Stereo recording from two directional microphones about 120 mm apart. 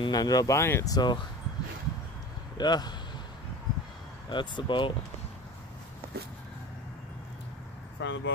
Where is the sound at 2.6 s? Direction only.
35° left (ahead or behind).